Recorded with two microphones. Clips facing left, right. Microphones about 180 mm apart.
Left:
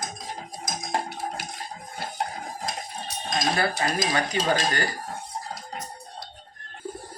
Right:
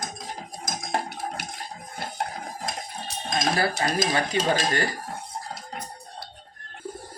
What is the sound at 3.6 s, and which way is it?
Speech, 35° right (ahead or behind).